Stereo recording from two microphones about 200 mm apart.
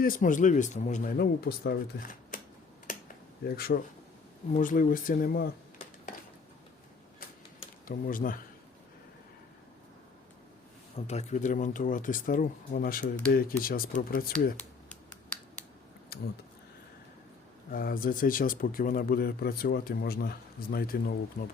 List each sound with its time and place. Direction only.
0.0 s speech: 40° left (ahead or behind)
2.9 s computer keyboard: 40° left (ahead or behind)
3.4 s speech: 50° left (ahead or behind)
7.9 s speech: 45° left (ahead or behind)
10.9 s speech: 35° left (ahead or behind)
17.7 s speech: 45° left (ahead or behind)